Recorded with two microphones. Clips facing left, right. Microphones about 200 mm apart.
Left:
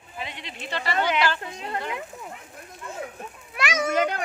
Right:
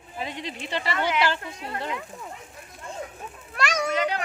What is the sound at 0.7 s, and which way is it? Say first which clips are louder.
Speech: even; 25° right (ahead or behind).